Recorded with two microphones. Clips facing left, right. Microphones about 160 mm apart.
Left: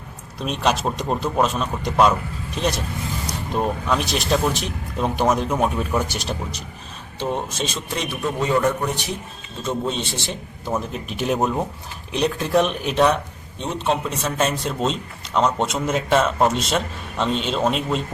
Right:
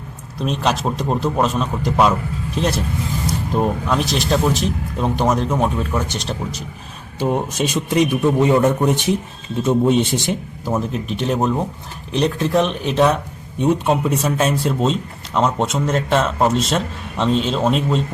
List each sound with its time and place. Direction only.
0.3 s a man's voice: centre (ahead or behind)
7.2 s a man's voice: 10° right (ahead or behind)
10.7 s a man's voice: centre (ahead or behind)
13.6 s a man's voice: 10° right (ahead or behind)